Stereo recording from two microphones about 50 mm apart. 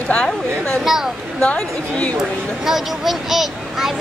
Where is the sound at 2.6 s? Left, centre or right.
Centre.